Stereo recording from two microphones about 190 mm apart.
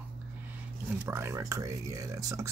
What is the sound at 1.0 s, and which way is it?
Speech, 15° right (ahead or behind).